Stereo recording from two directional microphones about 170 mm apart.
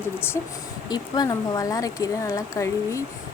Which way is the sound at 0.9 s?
25° left (ahead or behind).